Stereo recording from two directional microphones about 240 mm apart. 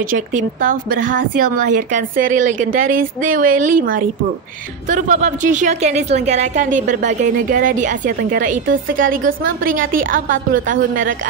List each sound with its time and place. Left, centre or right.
0.1 s speech: right